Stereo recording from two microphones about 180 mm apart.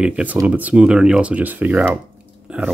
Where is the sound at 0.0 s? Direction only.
5° right (ahead or behind).